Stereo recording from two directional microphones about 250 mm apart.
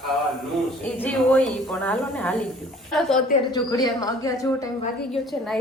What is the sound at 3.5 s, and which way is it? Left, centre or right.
Speech, centre.